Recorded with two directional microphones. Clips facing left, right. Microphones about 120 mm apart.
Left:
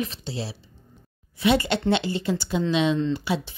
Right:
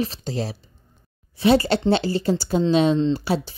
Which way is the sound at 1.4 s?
35° right (ahead or behind).